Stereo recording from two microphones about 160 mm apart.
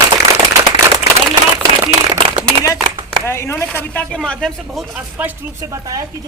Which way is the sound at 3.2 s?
15° left (ahead or behind).